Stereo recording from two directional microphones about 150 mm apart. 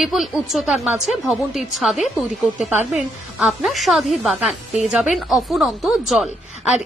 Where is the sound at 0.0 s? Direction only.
Centre (ahead or behind).